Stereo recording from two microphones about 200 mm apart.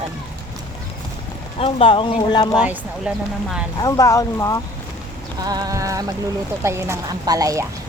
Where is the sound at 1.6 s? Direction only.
30° left (ahead or behind).